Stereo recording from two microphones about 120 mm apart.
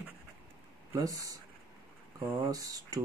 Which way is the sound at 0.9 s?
30° right (ahead or behind).